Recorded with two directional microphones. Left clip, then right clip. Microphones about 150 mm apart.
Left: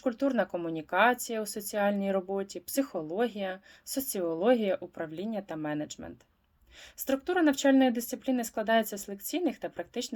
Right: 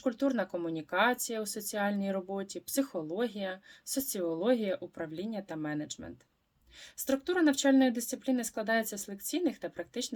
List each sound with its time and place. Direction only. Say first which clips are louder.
0.0 s speech: left 3 dB; 20° right (ahead or behind)